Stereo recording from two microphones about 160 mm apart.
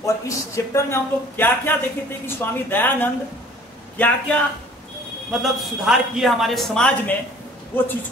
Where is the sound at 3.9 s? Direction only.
10° left (ahead or behind).